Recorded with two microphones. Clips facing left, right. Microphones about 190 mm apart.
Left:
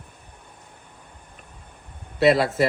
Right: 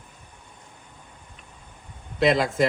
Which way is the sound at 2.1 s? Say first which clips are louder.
Left 2 dB; 5° left (ahead or behind).